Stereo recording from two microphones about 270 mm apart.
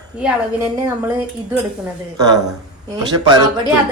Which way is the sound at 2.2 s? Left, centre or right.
Centre.